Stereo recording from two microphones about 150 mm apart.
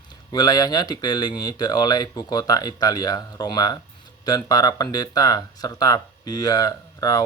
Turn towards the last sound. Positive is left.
turn(degrees=25)  # may be behind; listen again after turning